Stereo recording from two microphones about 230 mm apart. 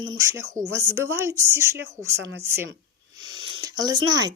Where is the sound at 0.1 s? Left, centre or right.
Centre.